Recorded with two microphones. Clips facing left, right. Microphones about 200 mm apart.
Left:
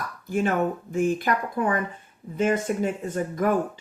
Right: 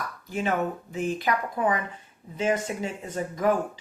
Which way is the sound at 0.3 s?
50° left (ahead or behind).